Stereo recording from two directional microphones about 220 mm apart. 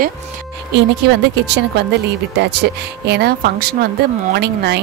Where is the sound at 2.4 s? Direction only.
50° right (ahead or behind).